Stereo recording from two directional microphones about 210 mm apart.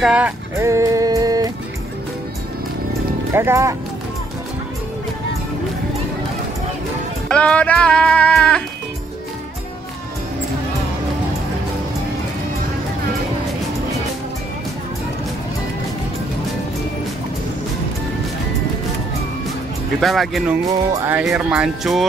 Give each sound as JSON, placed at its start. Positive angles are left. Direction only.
{"t": 0.0, "sound": "music", "side_deg": -5}
{"t": 3.3, "sound": "speech", "side_deg": -15}
{"t": 7.2, "sound": "music", "side_deg": 5}
{"t": 20.0, "sound": "music", "side_deg": 0}